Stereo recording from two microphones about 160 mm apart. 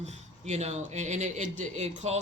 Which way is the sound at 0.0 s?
45° right (ahead or behind).